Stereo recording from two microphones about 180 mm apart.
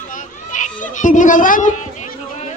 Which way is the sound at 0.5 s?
45° left (ahead or behind).